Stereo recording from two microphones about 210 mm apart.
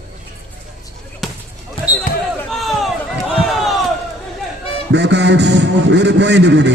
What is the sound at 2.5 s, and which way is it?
Run, centre (ahead or behind).